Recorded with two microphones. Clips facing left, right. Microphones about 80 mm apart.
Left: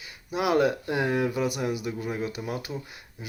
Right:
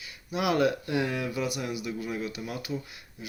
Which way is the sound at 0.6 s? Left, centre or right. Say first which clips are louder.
Left 1 dB; left.